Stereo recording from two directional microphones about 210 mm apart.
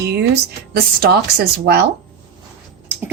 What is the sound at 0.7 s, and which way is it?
A woman's voice, 50° right (ahead or behind).